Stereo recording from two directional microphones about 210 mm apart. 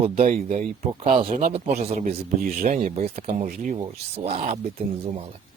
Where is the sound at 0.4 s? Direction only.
30° right (ahead or behind).